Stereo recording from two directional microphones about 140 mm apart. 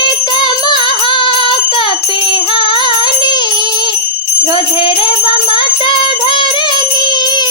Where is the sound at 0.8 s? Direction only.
35° left (ahead or behind).